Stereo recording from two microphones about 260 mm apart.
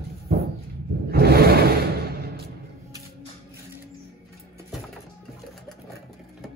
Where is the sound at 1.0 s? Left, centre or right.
Right.